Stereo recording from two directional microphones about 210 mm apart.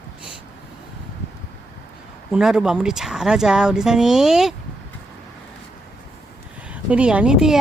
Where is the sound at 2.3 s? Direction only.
5° right (ahead or behind).